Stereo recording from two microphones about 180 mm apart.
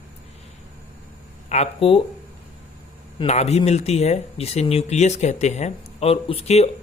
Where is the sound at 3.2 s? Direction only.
35° left (ahead or behind).